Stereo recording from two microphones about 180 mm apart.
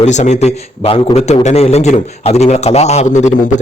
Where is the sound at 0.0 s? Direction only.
40° left (ahead or behind).